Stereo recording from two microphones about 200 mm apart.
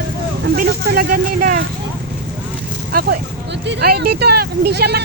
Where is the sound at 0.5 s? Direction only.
45° right (ahead or behind).